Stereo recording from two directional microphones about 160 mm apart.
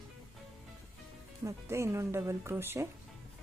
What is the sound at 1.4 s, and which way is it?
Speech, 15° right (ahead or behind).